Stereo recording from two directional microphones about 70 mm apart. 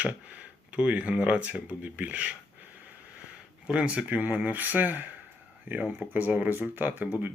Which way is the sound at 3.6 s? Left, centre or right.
Centre.